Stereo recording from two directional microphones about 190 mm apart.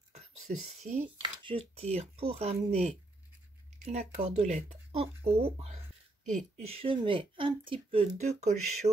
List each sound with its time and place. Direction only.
0.5 s speech: 45° right (ahead or behind)
1.2 s speech: 25° right (ahead or behind)